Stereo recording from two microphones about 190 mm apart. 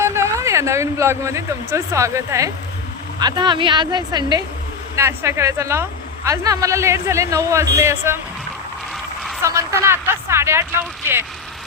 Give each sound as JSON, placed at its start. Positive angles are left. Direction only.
{"t": 0.0, "sound": "speech", "side_deg": -15}
{"t": 9.4, "sound": "speech", "side_deg": -15}